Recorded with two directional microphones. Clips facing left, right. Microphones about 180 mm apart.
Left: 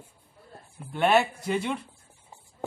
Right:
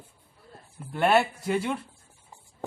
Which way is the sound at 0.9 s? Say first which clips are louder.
Even; centre (ahead or behind).